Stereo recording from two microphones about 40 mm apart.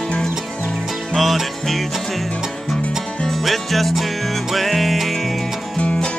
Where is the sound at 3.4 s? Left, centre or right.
Centre.